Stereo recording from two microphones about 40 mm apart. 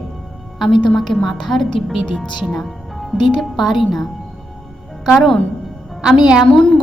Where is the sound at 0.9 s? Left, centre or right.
Centre.